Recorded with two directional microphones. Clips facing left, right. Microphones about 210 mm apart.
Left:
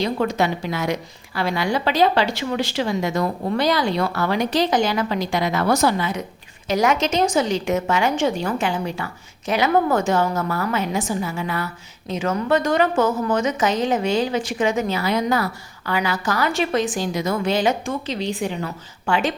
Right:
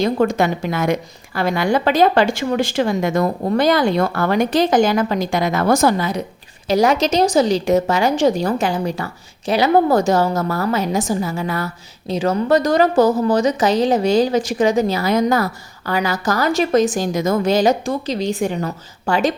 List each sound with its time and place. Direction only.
0.0 s a woman's voice: 50° right (ahead or behind)